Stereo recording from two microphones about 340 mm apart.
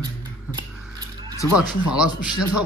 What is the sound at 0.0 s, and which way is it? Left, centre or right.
Music, centre.